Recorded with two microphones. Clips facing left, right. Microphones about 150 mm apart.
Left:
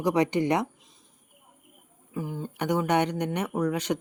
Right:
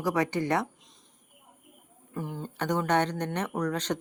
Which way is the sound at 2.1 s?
5° left (ahead or behind).